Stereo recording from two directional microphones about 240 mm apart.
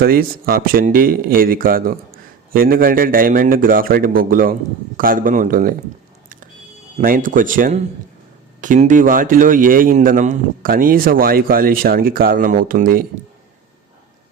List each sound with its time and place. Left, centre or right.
0.0 s speech: right
7.0 s speech: right